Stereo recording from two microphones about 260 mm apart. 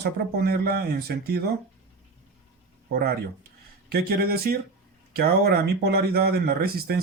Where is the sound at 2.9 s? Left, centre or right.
Right.